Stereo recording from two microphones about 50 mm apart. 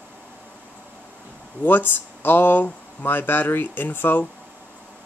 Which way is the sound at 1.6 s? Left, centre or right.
Left.